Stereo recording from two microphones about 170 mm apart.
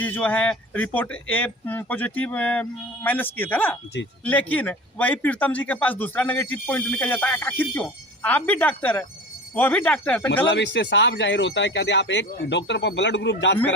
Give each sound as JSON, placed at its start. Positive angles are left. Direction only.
{"t": 0.0, "sound": "a man's voice", "side_deg": 10}
{"t": 10.4, "sound": "speech", "side_deg": 90}